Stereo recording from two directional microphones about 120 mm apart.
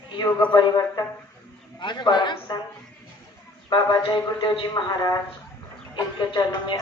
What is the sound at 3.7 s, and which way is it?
A man's voice, 40° left (ahead or behind).